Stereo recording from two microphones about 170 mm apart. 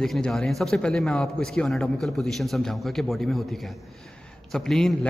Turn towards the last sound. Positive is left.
turn(degrees=0)  # may be behind; listen again after turning